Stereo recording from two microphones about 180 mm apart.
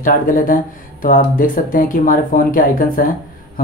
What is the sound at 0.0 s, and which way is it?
Speech, 50° left (ahead or behind).